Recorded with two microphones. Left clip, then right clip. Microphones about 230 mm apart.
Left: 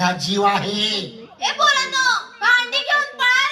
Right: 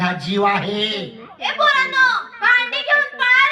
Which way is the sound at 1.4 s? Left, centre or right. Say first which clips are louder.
Right 1 dB; left.